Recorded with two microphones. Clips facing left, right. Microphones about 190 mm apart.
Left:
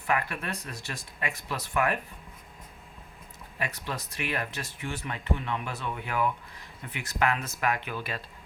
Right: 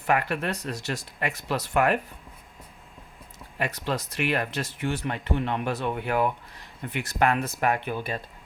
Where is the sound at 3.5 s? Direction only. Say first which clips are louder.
Right 6 dB; 65° right (ahead or behind).